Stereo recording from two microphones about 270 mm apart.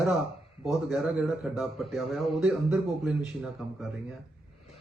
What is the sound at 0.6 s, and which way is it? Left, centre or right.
A man's voice, centre.